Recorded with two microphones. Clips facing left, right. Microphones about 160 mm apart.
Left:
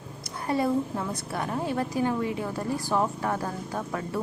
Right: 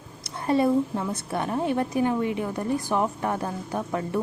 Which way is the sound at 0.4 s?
25° right (ahead or behind).